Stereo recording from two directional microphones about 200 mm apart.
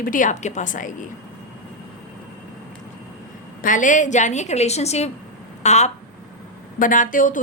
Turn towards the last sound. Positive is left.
turn(degrees=40)  # may be behind; listen again after turning